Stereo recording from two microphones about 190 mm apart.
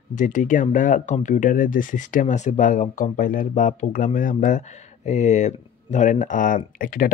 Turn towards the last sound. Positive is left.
turn(degrees=45)  # may be behind; listen again after turning